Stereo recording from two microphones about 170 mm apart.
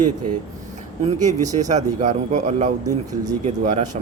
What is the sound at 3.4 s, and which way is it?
Speech, 40° right (ahead or behind).